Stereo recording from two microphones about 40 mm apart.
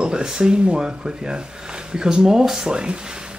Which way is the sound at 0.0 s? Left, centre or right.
Centre.